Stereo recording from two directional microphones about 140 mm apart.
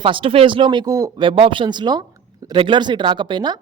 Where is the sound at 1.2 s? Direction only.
40° right (ahead or behind).